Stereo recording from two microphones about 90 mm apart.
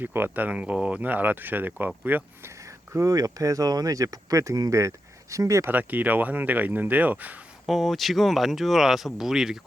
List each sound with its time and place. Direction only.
0.0 s speech: 25° right (ahead or behind)
2.6 s speech: 35° right (ahead or behind)
5.7 s speech: 20° right (ahead or behind)
7.7 s speech: centre (ahead or behind)